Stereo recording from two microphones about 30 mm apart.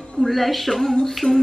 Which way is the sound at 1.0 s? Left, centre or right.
Centre.